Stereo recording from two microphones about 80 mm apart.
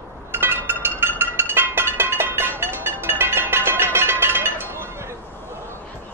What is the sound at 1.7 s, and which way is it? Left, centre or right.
Music, right.